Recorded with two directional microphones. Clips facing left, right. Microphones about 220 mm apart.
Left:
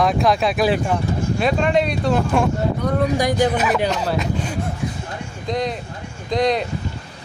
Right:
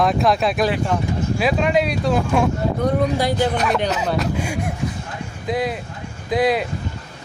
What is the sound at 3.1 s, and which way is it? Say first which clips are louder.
Speech: left 1 dB; 15° left (ahead or behind).